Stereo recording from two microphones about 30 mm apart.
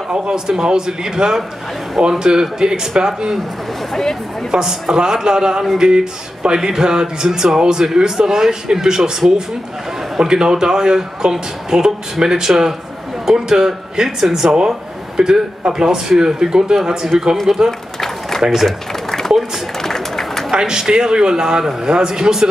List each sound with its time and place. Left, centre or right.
0.1 s speech: right
3.9 s speech: centre
4.5 s speech: centre
10.1 s speech: right
17.6 s run: centre
18.4 s a man's voice: centre
19.0 s a sound: centre
19.8 s run: centre
20.5 s speech: right